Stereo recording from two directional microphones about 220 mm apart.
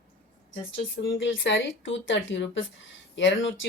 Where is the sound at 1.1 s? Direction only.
55° left (ahead or behind).